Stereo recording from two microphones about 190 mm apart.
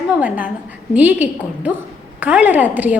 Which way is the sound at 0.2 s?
10° right (ahead or behind).